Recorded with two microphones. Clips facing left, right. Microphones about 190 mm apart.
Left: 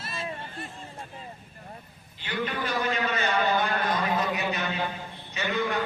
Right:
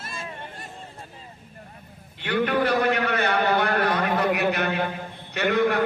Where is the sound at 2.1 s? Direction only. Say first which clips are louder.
Right 8 dB; 60° right (ahead or behind).